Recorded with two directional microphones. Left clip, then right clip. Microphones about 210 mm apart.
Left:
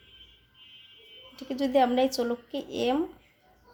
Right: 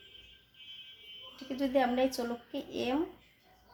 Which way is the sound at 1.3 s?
50° left (ahead or behind).